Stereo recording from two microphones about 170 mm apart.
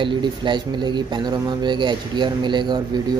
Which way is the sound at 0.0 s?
30° right (ahead or behind).